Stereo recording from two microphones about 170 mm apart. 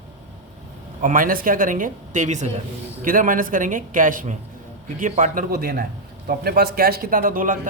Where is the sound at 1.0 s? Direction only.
50° right (ahead or behind).